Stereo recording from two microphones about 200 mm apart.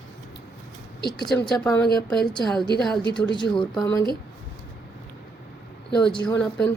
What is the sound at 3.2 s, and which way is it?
Speech, 25° left (ahead or behind).